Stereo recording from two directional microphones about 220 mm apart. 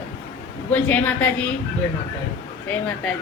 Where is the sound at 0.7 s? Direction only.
5° left (ahead or behind).